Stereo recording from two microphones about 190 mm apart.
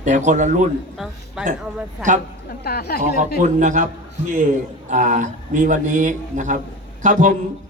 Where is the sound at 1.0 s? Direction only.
5° right (ahead or behind).